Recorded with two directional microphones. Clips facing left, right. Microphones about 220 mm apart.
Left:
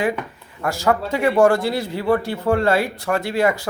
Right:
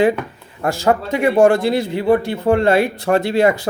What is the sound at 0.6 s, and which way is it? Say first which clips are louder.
Speech: right 3 dB; 25° right (ahead or behind).